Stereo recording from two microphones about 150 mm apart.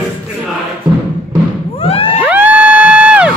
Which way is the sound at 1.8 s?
40° left (ahead or behind).